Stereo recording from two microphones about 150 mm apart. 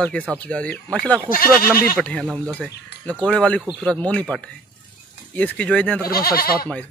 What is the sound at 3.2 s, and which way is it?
Speech, 10° left (ahead or behind).